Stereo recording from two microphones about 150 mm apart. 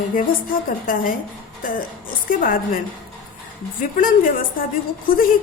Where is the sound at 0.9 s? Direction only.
70° left (ahead or behind).